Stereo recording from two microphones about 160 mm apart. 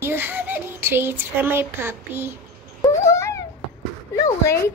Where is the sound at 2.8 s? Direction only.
20° left (ahead or behind).